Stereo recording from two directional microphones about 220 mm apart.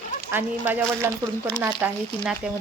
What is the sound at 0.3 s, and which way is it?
A woman's voice, 10° right (ahead or behind).